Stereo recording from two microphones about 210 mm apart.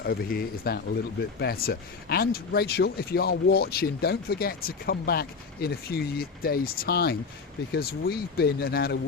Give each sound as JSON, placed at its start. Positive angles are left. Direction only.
{"t": 0.0, "sound": "speech", "side_deg": 45}